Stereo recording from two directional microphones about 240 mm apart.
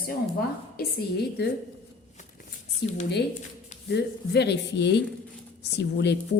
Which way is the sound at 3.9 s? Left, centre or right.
Left.